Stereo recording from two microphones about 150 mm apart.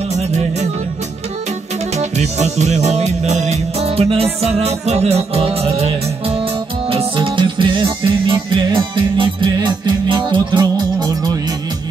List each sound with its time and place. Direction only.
0.1 s music: 50° right (ahead or behind)
2.0 s music: 50° right (ahead or behind); by 11.3 s 25° right (ahead or behind)